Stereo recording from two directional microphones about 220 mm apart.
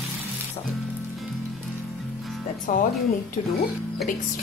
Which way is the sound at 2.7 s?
35° left (ahead or behind).